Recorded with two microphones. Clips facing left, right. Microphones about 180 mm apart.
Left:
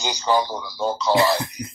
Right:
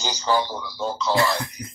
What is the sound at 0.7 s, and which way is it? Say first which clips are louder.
Speech: left 3 dB; 35° left (ahead or behind).